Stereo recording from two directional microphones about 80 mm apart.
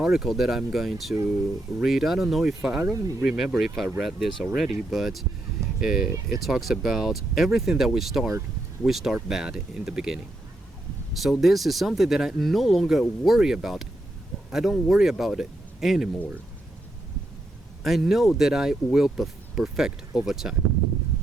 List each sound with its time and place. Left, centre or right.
0.0 s speech: centre
2.6 s speech: centre
3.2 s speech: centre
6.1 s speech: right
6.4 s speech: centre
17.8 s speech: centre